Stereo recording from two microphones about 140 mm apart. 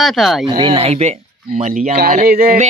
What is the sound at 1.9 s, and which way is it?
Speech, 75° right (ahead or behind).